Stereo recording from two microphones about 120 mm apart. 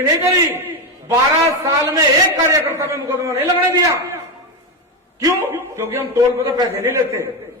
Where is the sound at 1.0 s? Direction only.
25° right (ahead or behind).